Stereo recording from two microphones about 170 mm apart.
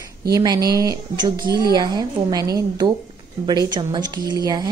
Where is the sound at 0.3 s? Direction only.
25° right (ahead or behind).